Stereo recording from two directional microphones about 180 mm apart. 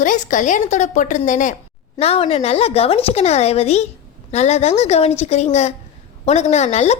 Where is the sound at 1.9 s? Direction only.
35° left (ahead or behind).